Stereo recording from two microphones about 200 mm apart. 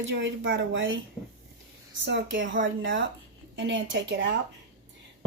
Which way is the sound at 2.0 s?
65° right (ahead or behind).